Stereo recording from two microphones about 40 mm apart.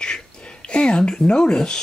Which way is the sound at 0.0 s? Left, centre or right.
Left.